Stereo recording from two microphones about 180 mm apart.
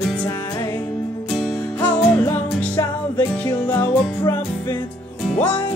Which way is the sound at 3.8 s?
15° left (ahead or behind).